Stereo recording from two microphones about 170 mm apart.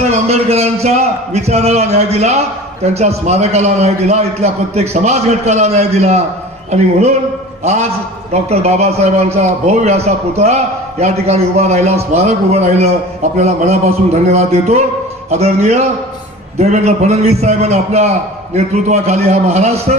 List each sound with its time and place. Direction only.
0.0 s a man's voice: 40° right (ahead or behind)